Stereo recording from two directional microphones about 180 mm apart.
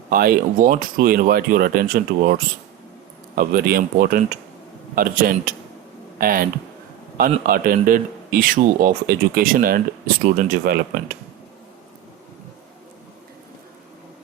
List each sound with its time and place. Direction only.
0.1 s speech: 55° right (ahead or behind)
3.3 s speech: 55° right (ahead or behind)